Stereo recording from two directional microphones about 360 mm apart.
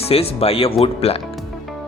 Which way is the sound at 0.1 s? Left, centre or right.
Centre.